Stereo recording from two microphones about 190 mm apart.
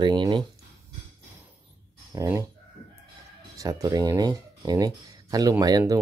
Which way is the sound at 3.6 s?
20° right (ahead or behind).